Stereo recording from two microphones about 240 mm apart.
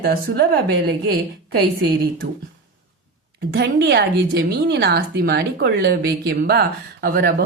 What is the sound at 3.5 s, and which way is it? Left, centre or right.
Speech, right.